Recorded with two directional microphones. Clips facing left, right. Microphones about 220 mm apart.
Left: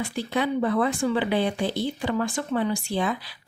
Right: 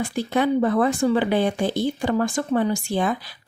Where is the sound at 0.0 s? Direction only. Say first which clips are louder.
Right 4 dB; 45° right (ahead or behind).